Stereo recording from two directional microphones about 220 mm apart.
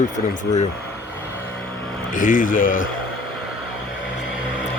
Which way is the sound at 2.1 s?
40° left (ahead or behind).